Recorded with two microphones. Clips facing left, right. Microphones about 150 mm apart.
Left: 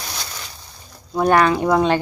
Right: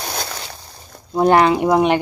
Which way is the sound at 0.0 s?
50° right (ahead or behind).